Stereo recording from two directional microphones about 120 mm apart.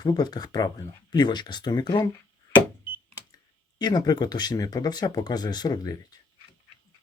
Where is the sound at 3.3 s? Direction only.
35° left (ahead or behind).